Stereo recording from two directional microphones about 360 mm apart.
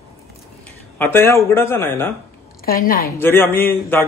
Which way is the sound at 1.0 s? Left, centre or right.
Centre.